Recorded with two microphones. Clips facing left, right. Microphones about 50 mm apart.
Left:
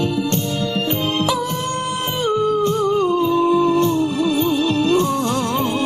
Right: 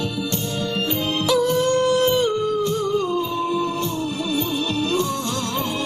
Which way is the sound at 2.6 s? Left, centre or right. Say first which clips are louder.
Left 4 dB; left.